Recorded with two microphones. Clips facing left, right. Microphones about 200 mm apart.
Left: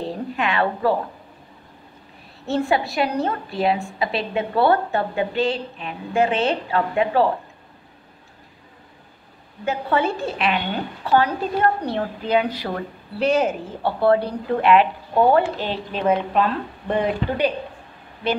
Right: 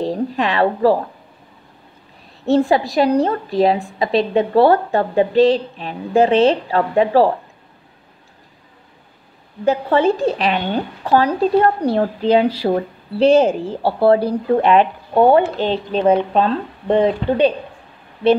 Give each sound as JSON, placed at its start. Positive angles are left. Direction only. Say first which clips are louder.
{"t": 0.0, "sound": "a woman's voice", "louder": "right 6 dB", "side_deg": -35}
{"t": 2.4, "sound": "a woman's voice", "louder": "right 6 dB", "side_deg": -35}
{"t": 9.7, "sound": "a woman's voice", "louder": "right 7 dB", "side_deg": -35}
{"t": 15.1, "sound": "speech", "louder": "right 4 dB", "side_deg": -25}